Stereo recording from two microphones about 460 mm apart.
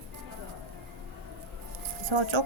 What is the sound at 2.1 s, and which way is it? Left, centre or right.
Speech, right.